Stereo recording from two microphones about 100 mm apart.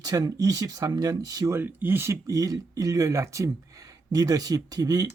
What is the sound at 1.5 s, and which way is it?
Speech, 20° right (ahead or behind).